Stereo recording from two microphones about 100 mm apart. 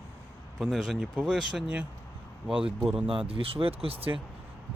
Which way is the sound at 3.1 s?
65° right (ahead or behind).